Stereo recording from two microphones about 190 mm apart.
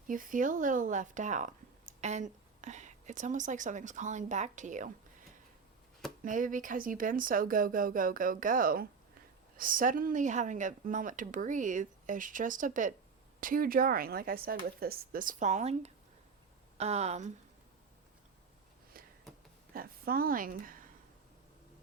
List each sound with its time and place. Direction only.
0.1 s speech: 45° right (ahead or behind)
6.2 s a woman's voice: 45° right (ahead or behind)
18.9 s a sound: 50° right (ahead or behind)
19.7 s speech: 50° right (ahead or behind)